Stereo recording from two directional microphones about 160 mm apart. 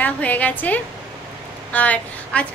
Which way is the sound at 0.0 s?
10° left (ahead or behind).